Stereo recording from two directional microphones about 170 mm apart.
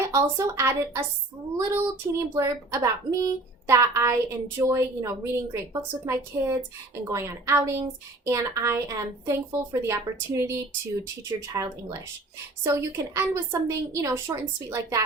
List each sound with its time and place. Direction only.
0.1 s a woman's voice: 20° right (ahead or behind)
13.1 s a woman's voice: 15° right (ahead or behind)